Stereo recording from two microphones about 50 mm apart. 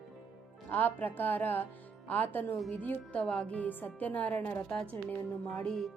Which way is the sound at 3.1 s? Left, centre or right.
Left.